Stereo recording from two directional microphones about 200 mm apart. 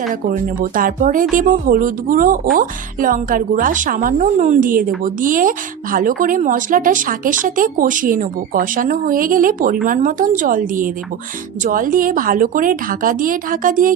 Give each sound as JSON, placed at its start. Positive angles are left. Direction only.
{"t": 0.3, "sound": "speech", "side_deg": -40}